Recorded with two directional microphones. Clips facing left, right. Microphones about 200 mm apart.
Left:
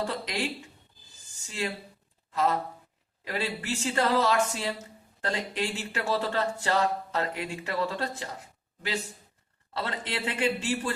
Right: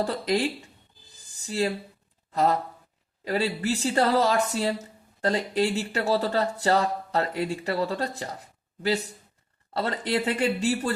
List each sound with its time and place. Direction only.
0.0 s speech: 40° right (ahead or behind)